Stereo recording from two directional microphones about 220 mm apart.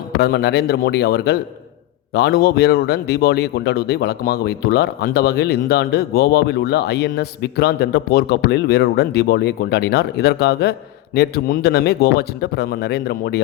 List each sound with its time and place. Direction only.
0.2 s a man's voice: 45° left (ahead or behind)